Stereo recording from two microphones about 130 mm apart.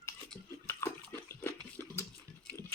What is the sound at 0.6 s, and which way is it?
Water, 20° left (ahead or behind).